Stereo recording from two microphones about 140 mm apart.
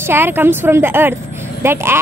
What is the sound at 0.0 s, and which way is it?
A woman's voice, 15° right (ahead or behind).